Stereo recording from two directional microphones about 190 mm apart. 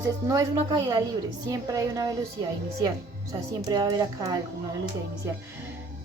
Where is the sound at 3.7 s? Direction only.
20° right (ahead or behind).